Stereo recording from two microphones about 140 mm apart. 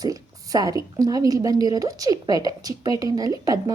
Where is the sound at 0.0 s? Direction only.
25° right (ahead or behind).